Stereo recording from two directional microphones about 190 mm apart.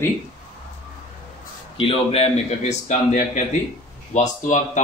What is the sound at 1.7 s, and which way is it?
A man's voice, 30° left (ahead or behind).